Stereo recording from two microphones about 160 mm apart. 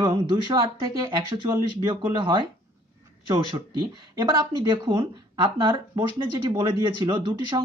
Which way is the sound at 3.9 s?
25° right (ahead or behind).